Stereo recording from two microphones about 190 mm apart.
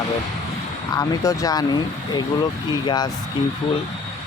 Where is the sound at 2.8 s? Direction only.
20° left (ahead or behind).